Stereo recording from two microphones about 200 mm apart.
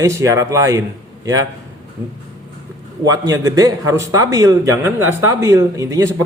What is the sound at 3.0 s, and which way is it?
A man's voice, 20° right (ahead or behind).